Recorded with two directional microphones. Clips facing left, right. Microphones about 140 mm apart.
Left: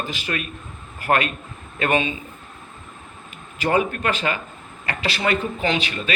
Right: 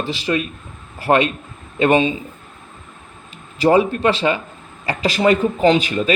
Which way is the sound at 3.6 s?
30° right (ahead or behind).